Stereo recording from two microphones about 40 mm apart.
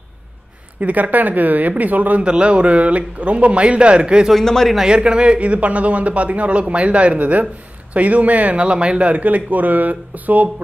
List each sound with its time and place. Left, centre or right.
0.7 s speech: right
2.2 s speech: right